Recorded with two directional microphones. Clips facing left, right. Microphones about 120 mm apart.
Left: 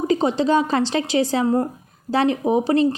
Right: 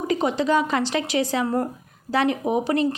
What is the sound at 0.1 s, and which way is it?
Speech, 30° left (ahead or behind).